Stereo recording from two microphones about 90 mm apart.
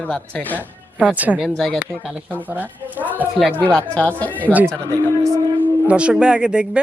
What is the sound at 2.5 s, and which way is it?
Speech, 20° right (ahead or behind).